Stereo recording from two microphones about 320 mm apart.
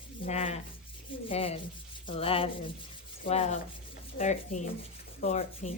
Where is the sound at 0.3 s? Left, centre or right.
Centre.